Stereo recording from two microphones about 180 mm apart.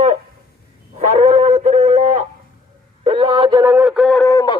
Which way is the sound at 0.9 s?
40° right (ahead or behind).